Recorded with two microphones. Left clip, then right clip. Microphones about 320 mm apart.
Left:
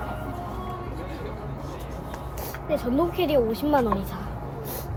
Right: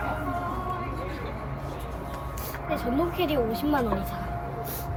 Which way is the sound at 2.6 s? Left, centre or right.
Centre.